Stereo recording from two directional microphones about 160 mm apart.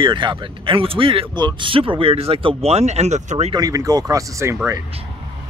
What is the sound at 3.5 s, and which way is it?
Speech, 20° right (ahead or behind).